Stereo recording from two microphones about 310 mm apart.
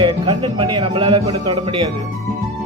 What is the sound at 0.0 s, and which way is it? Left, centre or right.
Speech, centre.